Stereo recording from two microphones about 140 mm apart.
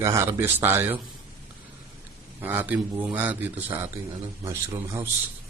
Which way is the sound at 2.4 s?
15° right (ahead or behind).